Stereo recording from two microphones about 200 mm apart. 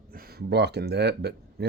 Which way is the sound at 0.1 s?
50° right (ahead or behind).